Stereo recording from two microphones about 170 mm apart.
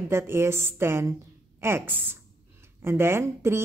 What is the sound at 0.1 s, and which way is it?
A woman's voice, 15° right (ahead or behind).